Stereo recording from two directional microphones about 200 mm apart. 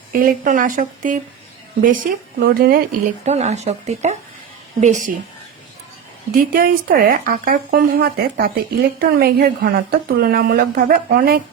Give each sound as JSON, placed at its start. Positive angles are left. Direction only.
{"t": 0.1, "sound": "speech", "side_deg": -45}
{"t": 3.2, "sound": "speech", "side_deg": -35}
{"t": 6.5, "sound": "speech", "side_deg": -45}